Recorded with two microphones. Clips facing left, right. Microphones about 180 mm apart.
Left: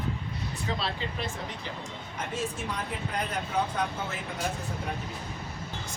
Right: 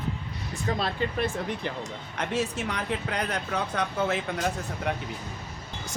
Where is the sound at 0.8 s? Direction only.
55° right (ahead or behind).